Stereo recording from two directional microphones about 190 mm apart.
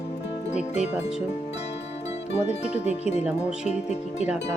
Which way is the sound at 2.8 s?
35° left (ahead or behind).